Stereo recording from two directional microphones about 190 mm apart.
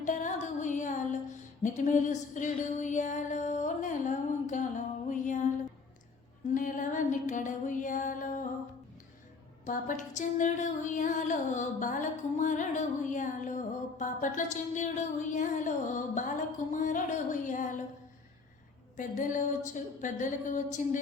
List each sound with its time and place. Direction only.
0.0 s music: 40° left (ahead or behind)
1.6 s female singing: 40° left (ahead or behind)
5.0 s music: 40° left (ahead or behind)
6.5 s a sound: 45° left (ahead or behind)
9.6 s female singing: 45° left (ahead or behind)
18.9 s a sound: 45° left (ahead or behind)